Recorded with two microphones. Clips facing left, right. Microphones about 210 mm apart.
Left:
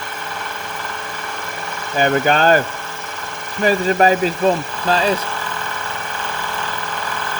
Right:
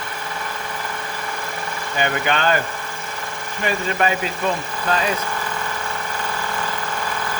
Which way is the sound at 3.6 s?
35° left (ahead or behind).